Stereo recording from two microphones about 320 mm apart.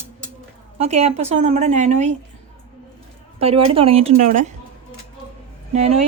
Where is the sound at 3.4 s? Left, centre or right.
Centre.